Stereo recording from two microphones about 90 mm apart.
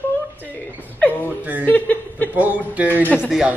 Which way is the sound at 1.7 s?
20° left (ahead or behind).